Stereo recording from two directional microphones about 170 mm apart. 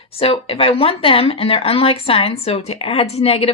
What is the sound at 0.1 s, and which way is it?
Speech, 35° left (ahead or behind).